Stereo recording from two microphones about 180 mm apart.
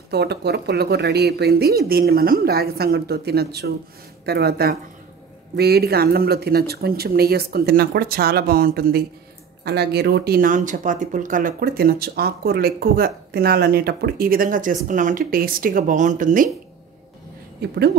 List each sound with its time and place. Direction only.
0.1 s speech: 65° right (ahead or behind); by 16.4 s 45° right (ahead or behind)
17.6 s speech: 65° right (ahead or behind)